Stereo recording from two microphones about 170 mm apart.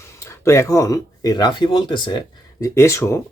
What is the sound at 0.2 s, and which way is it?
Speech, 15° left (ahead or behind).